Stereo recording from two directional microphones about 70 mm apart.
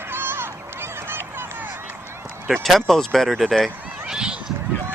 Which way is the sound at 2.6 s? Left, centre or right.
Centre.